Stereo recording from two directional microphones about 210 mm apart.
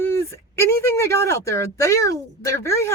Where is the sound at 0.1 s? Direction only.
10° left (ahead or behind).